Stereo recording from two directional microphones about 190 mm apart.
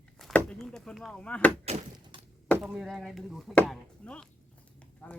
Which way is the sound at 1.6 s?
35° right (ahead or behind).